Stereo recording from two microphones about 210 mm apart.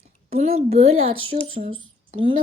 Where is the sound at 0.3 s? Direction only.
30° right (ahead or behind).